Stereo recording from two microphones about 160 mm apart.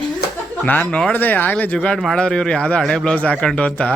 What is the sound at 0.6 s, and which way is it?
Speech, 10° left (ahead or behind).